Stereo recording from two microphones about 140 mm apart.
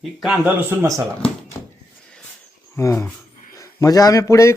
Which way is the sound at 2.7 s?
20° left (ahead or behind).